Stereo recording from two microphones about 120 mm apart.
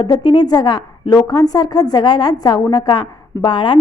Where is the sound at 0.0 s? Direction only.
40° left (ahead or behind).